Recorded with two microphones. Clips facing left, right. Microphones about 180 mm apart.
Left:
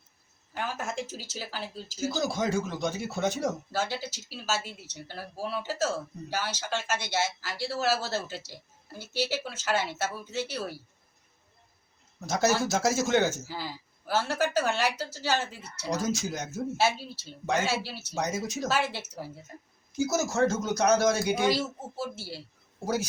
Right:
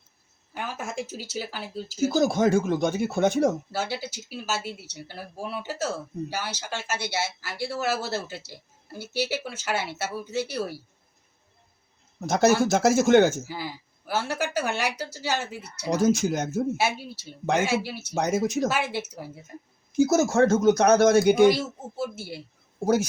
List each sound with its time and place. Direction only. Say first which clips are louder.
0.5 s speech: right 1 dB; 10° right (ahead or behind)
2.0 s speech: right 7 dB; 50° right (ahead or behind)
3.7 s speech: right 1 dB; 10° right (ahead or behind)
12.2 s speech: right 6 dB; 55° right (ahead or behind)
13.5 s speech: right 3 dB; 15° right (ahead or behind)
15.9 s speech: right 8 dB; 50° right (ahead or behind)
16.7 s speech: even; 15° right (ahead or behind)
18.1 s speech: right 7 dB; 55° right (ahead or behind)
18.7 s speech: right 1 dB; 15° right (ahead or behind)
20.0 s speech: right 6 dB; 55° right (ahead or behind)